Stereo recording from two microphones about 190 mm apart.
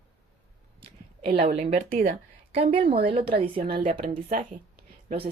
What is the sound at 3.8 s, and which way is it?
Speech, 40° right (ahead or behind).